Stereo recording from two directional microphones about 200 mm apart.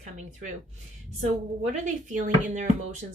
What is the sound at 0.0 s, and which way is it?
Speech, 35° right (ahead or behind).